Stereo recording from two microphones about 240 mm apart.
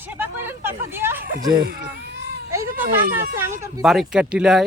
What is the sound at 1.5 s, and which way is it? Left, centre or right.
Speech, right.